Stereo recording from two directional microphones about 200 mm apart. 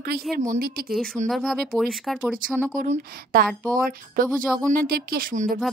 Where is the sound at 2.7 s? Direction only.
40° right (ahead or behind).